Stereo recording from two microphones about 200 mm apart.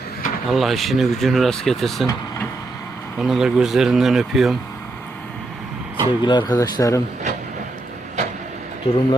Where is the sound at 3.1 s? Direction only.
Centre (ahead or behind).